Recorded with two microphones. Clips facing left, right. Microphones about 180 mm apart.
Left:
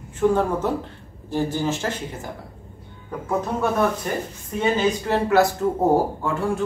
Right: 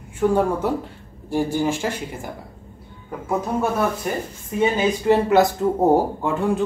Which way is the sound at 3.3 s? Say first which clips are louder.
Right 1 dB; 10° right (ahead or behind).